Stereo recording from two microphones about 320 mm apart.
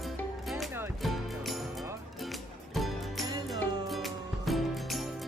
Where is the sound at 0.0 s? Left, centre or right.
Centre.